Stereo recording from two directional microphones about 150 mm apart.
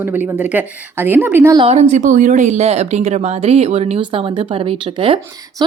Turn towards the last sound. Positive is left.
turn(degrees=-35)  # may be behind; listen again after turning